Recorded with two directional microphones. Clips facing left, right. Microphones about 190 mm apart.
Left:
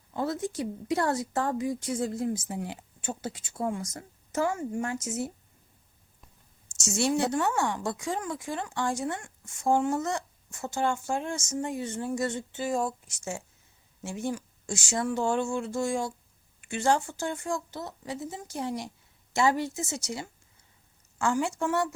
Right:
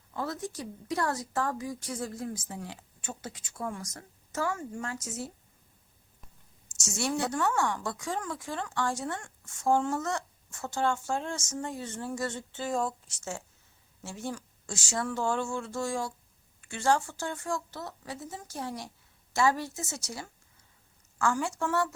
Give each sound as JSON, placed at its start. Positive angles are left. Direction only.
{"t": 0.1, "sound": "a woman's voice", "side_deg": 25}
{"t": 6.9, "sound": "a woman's voice", "side_deg": 25}
{"t": 21.2, "sound": "a woman's voice", "side_deg": 20}